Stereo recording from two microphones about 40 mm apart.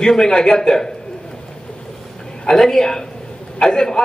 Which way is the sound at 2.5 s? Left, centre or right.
Centre.